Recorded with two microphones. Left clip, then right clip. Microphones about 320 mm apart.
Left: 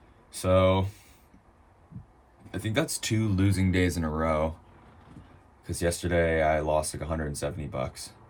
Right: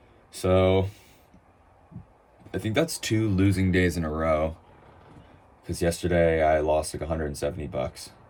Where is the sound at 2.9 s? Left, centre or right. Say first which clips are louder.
Right 3 dB; centre.